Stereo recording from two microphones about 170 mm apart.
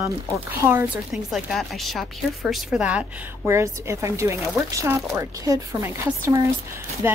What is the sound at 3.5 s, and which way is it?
A woman's voice, 15° right (ahead or behind).